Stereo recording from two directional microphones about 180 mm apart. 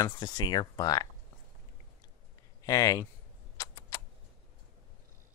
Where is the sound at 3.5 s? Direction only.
15° left (ahead or behind).